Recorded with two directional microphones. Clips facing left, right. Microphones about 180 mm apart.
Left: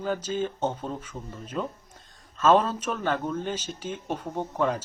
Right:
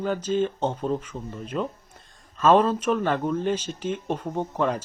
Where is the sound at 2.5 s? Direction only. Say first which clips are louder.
Right 3 dB; 5° left (ahead or behind).